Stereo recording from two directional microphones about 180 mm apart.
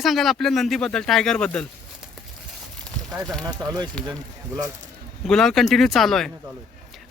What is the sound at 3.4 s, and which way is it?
Speech, 20° right (ahead or behind).